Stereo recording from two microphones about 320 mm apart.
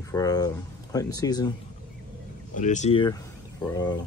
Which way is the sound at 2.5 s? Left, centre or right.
Left.